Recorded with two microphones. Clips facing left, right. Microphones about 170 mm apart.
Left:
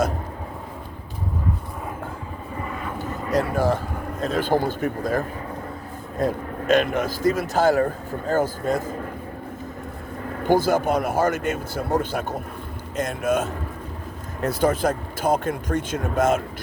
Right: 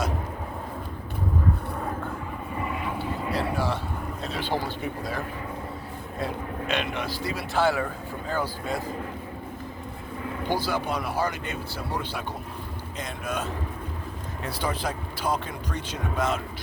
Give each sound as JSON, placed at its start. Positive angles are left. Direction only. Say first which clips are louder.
{"t": 3.0, "sound": "vehicle", "louder": "left 8 dB", "side_deg": 45}
{"t": 3.5, "sound": "speech", "louder": "left 6 dB", "side_deg": 45}
{"t": 10.2, "sound": "speech", "louder": "left 8 dB", "side_deg": 45}